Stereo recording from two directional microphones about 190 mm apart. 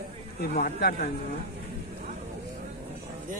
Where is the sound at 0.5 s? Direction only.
45° left (ahead or behind).